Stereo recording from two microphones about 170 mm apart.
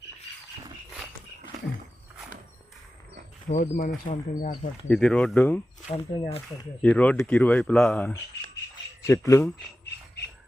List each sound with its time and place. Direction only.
3.5 s speech: 50° left (ahead or behind)
4.9 s speech: 5° left (ahead or behind)
5.9 s speech: 35° left (ahead or behind)
6.8 s speech: 10° left (ahead or behind)